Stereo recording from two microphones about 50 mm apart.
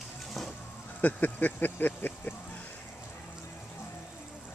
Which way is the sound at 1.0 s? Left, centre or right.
Left.